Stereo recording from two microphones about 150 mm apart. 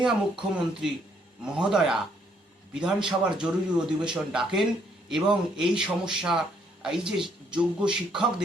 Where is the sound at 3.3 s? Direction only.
5° right (ahead or behind).